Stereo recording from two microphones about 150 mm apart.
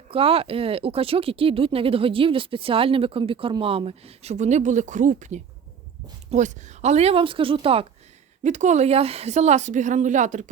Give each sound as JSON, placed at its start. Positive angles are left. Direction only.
{"t": 0.1, "sound": "speech", "side_deg": -40}
{"t": 8.4, "sound": "a woman's voice", "side_deg": -50}